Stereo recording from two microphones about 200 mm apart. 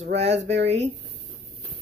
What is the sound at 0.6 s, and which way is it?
Speech, 30° right (ahead or behind).